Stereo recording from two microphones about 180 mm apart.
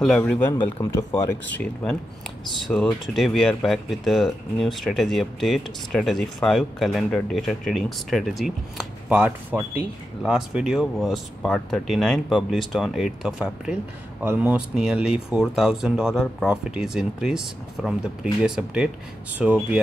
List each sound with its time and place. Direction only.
0.0 s speech: 5° left (ahead or behind)